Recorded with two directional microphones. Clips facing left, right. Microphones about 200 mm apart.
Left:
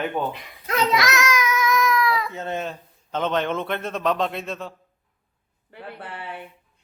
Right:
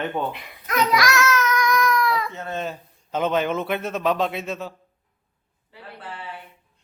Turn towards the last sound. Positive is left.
turn(degrees=60)  # may be behind; listen again after turning